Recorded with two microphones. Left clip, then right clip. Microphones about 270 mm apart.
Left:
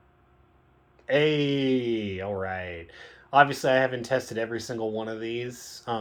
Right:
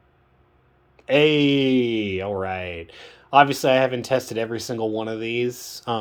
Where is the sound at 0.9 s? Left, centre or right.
Right.